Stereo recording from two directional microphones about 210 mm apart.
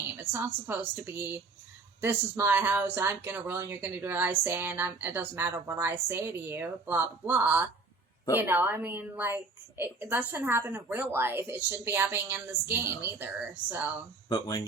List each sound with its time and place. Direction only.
0.2 s speech: 10° right (ahead or behind)
14.3 s speech: 15° left (ahead or behind)